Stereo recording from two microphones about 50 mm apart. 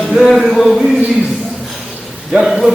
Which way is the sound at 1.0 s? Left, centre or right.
Centre.